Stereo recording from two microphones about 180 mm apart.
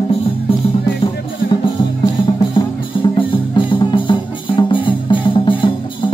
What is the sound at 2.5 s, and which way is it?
Music, 25° left (ahead or behind).